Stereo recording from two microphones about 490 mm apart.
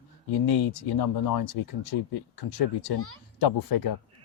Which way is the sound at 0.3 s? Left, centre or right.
Left.